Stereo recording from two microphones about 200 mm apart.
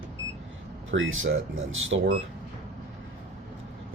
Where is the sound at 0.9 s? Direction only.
80° right.